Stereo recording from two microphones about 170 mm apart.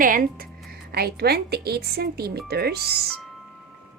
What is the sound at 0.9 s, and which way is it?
Speech, 65° right (ahead or behind).